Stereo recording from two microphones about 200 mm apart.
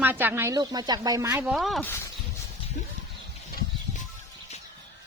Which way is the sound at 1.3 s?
5° right (ahead or behind).